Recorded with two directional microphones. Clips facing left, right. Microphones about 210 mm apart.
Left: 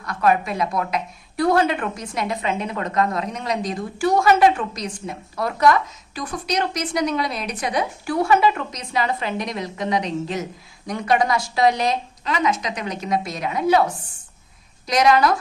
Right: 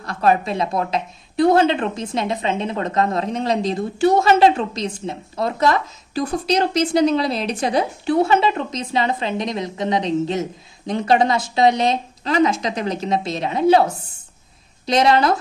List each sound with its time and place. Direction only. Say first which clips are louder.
0.0 s speech: right 2 dB; 30° right (ahead or behind)
14.9 s speech: right 1 dB; 25° right (ahead or behind)